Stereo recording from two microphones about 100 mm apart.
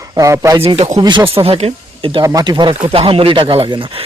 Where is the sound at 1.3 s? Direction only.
80° right; by 2.2 s 60° right (ahead or behind).